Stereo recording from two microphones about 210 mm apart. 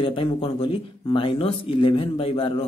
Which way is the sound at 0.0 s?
25° left (ahead or behind).